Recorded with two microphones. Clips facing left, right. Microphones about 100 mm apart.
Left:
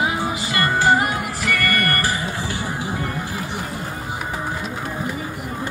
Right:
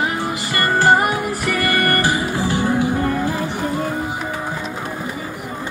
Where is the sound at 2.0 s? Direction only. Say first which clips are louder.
Right 5 dB; 30° right (ahead or behind).